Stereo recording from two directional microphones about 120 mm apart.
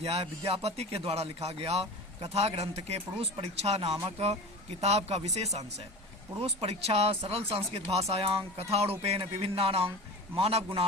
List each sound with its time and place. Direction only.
0.0 s speech: 60° right (ahead or behind)